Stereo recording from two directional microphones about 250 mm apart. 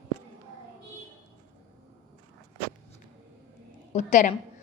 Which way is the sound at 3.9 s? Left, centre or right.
Left.